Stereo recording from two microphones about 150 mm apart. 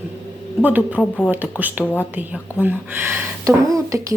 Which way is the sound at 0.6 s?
10° right (ahead or behind).